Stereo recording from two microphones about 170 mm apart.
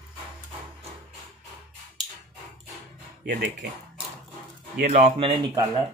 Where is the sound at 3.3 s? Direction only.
90° right.